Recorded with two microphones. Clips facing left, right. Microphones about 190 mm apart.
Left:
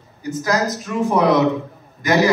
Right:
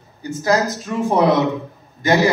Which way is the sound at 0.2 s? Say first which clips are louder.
Right 2 dB; 30° right (ahead or behind).